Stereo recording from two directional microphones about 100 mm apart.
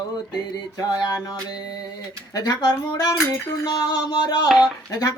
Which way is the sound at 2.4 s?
40° left (ahead or behind).